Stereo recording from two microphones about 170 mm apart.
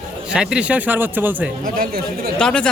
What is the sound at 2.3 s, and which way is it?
Speech, 5° left (ahead or behind).